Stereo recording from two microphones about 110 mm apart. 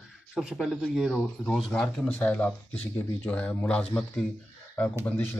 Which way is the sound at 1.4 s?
10° left (ahead or behind).